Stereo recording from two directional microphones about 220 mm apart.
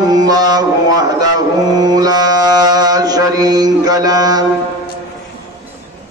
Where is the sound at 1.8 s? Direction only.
15° right (ahead or behind).